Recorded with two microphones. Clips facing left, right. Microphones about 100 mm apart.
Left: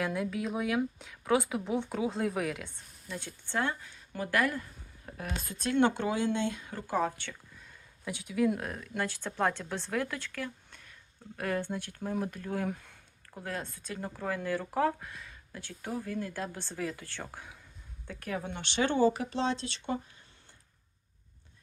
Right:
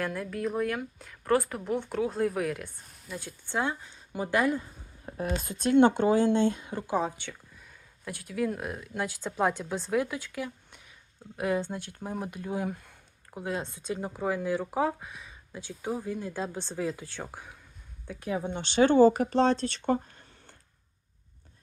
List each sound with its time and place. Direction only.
0.0 s speech: centre (ahead or behind); by 6.7 s 35° right (ahead or behind)
6.9 s speech: 15° right (ahead or behind)
8.0 s speech: centre (ahead or behind); by 18.6 s 20° right (ahead or behind)
18.6 s speech: 35° right (ahead or behind); by 20.2 s 50° right (ahead or behind)